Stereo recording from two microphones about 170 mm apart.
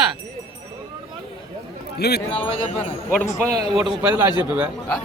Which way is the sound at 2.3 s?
35° left (ahead or behind).